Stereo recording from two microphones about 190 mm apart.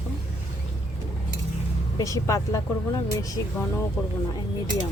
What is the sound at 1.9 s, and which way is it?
Speech, 15° left (ahead or behind).